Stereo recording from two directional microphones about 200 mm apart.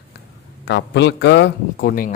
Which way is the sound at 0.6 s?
60° left (ahead or behind).